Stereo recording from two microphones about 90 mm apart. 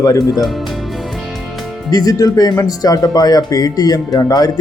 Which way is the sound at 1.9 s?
40° left (ahead or behind).